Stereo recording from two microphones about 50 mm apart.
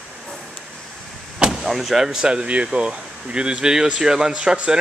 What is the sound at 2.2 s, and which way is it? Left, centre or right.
Speech, right.